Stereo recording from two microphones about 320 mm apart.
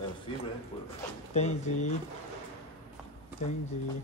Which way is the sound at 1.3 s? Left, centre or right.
Left.